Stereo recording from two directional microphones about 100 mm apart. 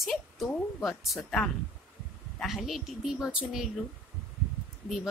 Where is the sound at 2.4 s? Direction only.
Centre (ahead or behind).